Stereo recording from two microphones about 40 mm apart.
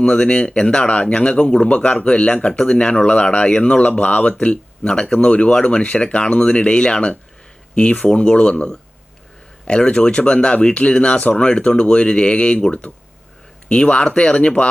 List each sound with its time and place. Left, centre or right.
0.0 s speech: left